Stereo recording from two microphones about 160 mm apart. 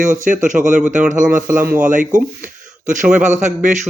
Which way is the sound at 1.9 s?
55° right (ahead or behind).